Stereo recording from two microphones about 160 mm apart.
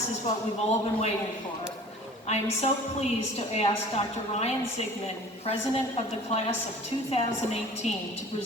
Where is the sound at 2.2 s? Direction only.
40° left (ahead or behind).